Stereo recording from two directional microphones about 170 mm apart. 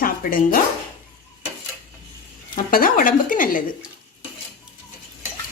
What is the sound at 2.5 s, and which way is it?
Speech, 55° left (ahead or behind).